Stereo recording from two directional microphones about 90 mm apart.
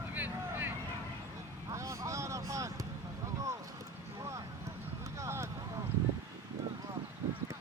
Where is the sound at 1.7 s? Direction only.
35° right (ahead or behind).